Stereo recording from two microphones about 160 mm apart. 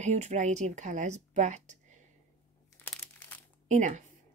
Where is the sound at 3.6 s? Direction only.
50° right (ahead or behind).